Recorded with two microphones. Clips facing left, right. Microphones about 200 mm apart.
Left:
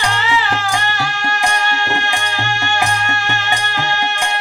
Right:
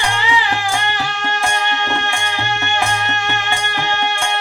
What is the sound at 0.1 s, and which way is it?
Music, 15° right (ahead or behind).